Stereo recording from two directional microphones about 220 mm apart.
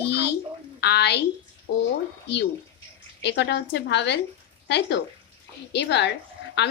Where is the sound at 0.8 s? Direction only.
50° left (ahead or behind).